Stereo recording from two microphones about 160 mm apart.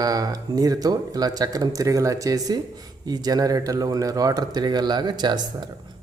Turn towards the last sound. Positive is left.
turn(degrees=-25)  # may be behind; listen again after turning